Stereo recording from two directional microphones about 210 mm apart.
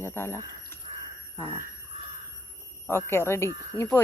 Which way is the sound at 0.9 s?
25° right (ahead or behind).